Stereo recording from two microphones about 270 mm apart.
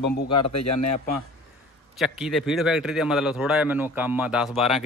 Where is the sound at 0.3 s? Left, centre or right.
Left.